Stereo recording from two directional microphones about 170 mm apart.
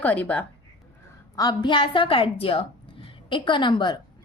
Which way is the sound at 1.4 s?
25° left (ahead or behind).